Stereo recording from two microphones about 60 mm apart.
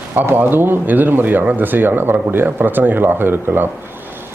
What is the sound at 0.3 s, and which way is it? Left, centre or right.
Speech, right.